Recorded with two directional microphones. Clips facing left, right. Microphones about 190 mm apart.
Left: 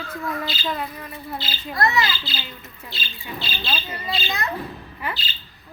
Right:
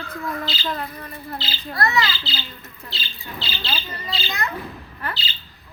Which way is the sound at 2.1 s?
55° left (ahead or behind).